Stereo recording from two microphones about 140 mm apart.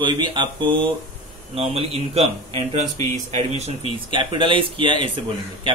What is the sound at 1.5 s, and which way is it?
Speech, 45° right (ahead or behind).